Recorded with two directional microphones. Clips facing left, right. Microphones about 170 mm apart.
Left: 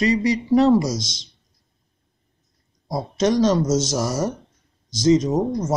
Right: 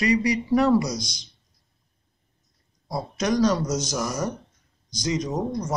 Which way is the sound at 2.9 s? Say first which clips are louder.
Left 5 dB; 25° left (ahead or behind).